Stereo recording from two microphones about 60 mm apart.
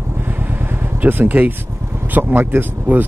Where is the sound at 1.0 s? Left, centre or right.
Right.